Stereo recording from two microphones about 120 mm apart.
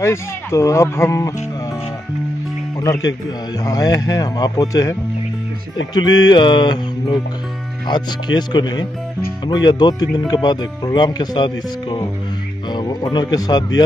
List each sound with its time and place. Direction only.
0.0 s speech: 25° left (ahead or behind)
2.8 s speech: 30° left (ahead or behind)
5.9 s speech: 35° left (ahead or behind)